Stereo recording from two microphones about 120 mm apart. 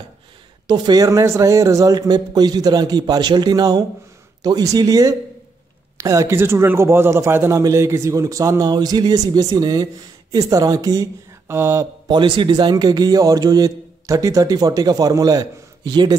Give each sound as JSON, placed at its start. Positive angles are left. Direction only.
{"t": 0.7, "sound": "a man's voice", "side_deg": -35}
{"t": 12.1, "sound": "a man's voice", "side_deg": -40}